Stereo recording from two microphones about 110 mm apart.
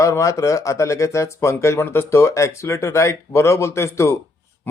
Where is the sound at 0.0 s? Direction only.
30° left (ahead or behind).